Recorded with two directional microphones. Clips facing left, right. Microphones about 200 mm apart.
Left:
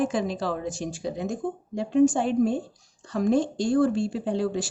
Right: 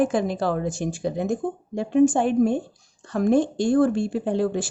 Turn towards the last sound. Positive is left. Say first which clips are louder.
# right 3 dB
turn(degrees=-50)  # may be behind; listen again after turning